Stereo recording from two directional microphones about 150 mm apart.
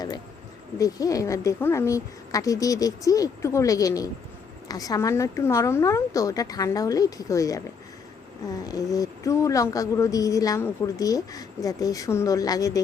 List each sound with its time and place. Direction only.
0.8 s speech: 25° left (ahead or behind)
8.6 s speech: 25° left (ahead or behind)